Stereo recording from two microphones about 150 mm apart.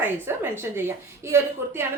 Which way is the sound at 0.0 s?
15° right (ahead or behind).